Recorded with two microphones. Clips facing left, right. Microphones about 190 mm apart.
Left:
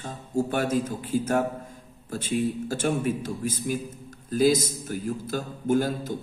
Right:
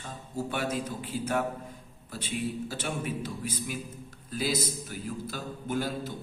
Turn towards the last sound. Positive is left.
turn(degrees=45)  # may be behind; listen again after turning